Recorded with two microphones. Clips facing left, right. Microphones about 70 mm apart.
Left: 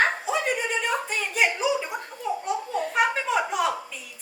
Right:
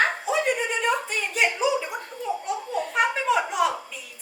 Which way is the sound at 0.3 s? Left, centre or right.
Centre.